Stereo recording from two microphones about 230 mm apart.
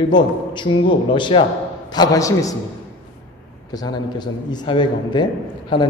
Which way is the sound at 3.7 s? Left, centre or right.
Centre.